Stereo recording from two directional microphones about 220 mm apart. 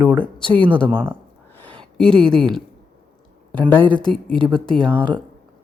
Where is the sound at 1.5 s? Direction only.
5° left (ahead or behind).